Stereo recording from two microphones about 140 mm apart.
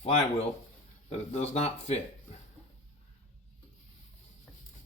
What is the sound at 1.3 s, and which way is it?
Speech, 50° left (ahead or behind).